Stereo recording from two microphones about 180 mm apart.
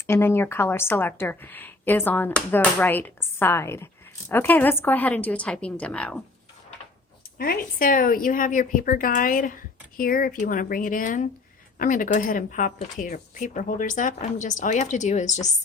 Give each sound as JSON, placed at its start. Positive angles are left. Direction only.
{"t": 0.1, "sound": "a woman's voice", "side_deg": 15}
{"t": 7.3, "sound": "a woman's voice", "side_deg": 55}